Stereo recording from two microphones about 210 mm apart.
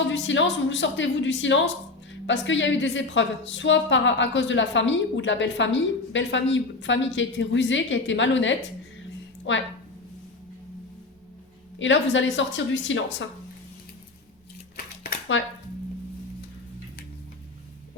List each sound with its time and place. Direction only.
0.1 s a woman's voice: 60° left (ahead or behind)
11.8 s a woman's voice: 60° left (ahead or behind)
15.3 s a woman's voice: 60° left (ahead or behind)